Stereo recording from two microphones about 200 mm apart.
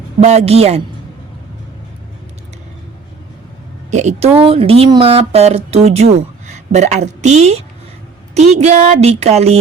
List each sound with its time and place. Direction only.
0.2 s speech: 35° right (ahead or behind)
3.9 s speech: 35° right (ahead or behind)